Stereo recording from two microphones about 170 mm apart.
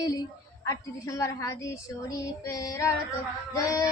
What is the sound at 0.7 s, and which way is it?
Child singing, 20° left (ahead or behind).